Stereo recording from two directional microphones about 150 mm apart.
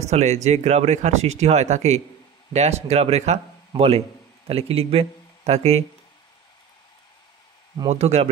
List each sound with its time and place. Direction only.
0.1 s speech: 50° right (ahead or behind)
7.9 s speech: 45° right (ahead or behind)